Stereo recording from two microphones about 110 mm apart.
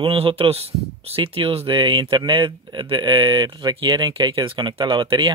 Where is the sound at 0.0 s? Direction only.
55° right (ahead or behind).